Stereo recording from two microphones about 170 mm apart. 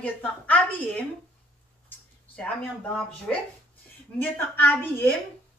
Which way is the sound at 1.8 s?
5° left (ahead or behind).